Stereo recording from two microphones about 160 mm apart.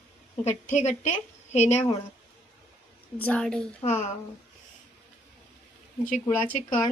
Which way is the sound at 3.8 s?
45° left (ahead or behind).